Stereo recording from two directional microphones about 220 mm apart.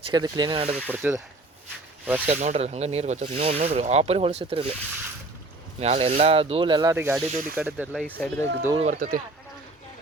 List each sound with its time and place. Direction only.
0.1 s speech: 20° right (ahead or behind)
0.9 s speech: 10° right (ahead or behind)
2.3 s speech: 30° right (ahead or behind)
5.8 s speech: 30° right (ahead or behind); by 7.9 s 10° right (ahead or behind)
7.9 s speech: 5° left (ahead or behind)
8.8 s speech: 35° right (ahead or behind)